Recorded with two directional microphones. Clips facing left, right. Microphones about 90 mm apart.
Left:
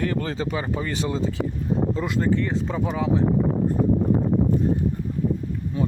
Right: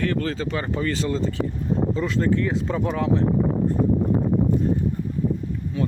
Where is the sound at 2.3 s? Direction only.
Centre (ahead or behind).